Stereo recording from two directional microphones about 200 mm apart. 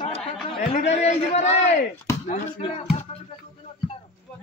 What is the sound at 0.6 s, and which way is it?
A man's voice, 35° left (ahead or behind).